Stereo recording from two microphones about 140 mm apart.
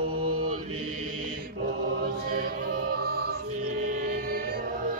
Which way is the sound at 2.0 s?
90° right.